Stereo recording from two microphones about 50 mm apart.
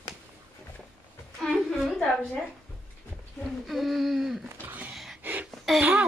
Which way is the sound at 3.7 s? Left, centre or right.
Centre.